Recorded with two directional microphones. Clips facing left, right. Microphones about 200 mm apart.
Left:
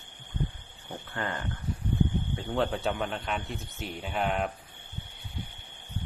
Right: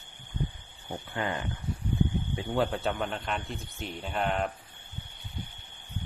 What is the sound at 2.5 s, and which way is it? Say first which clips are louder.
Speech: even; centre (ahead or behind).